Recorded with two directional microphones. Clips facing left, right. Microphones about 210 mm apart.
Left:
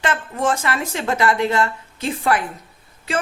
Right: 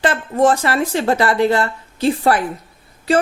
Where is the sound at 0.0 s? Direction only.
35° right (ahead or behind).